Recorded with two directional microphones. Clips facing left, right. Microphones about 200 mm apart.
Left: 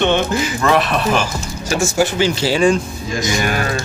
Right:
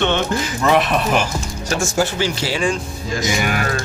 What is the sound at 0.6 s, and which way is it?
Speech, 15° right (ahead or behind).